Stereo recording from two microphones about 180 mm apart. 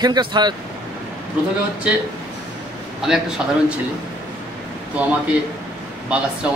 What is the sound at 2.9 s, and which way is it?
Speech, 5° right (ahead or behind).